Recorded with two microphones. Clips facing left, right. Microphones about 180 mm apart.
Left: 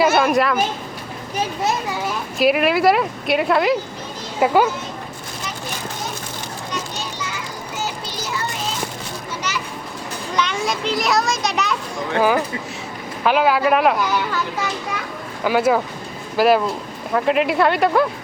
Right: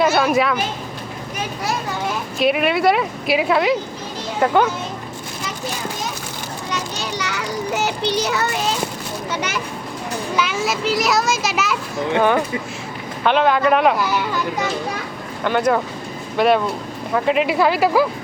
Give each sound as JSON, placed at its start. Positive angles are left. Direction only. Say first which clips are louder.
{"t": 0.0, "sound": "a child's voice", "louder": "even", "side_deg": 0}
{"t": 2.4, "sound": "a child's voice", "louder": "left 1 dB", "side_deg": 0}
{"t": 7.0, "sound": "child singing", "louder": "right 4 dB", "side_deg": -75}
{"t": 9.3, "sound": "a sound", "louder": "right 3 dB", "side_deg": -60}
{"t": 10.3, "sound": "a child's voice", "louder": "even", "side_deg": -5}
{"t": 13.2, "sound": "a child's voice", "louder": "right 1 dB", "side_deg": 5}
{"t": 15.4, "sound": "a child's voice", "louder": "left 1 dB", "side_deg": 5}